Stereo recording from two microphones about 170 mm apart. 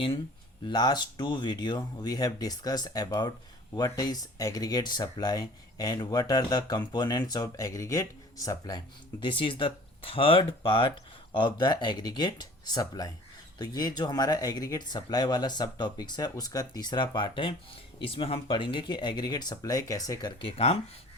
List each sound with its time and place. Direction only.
0.6 s speech: 25° left (ahead or behind)